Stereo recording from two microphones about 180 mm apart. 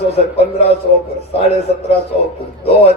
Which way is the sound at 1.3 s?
35° left (ahead or behind).